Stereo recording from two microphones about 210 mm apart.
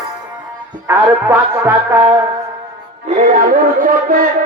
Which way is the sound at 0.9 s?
10° right (ahead or behind).